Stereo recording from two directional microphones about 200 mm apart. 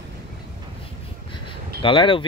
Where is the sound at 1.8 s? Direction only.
25° left (ahead or behind).